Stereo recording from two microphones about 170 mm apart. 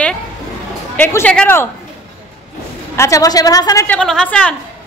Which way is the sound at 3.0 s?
20° left (ahead or behind).